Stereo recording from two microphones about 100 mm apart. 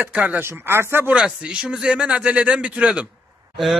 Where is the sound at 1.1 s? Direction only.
10° right (ahead or behind).